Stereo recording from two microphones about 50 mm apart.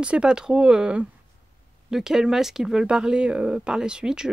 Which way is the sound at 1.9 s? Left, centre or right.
Centre.